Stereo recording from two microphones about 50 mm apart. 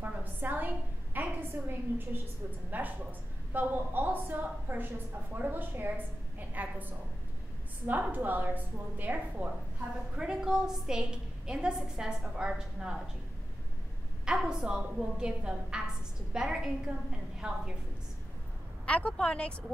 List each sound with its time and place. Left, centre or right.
0.0 s a sound: right
1.1 s a woman's voice: right
8.0 s a woman's voice: right
10.1 s a woman's voice: centre
14.2 s a woman's voice: centre
18.9 s speech: left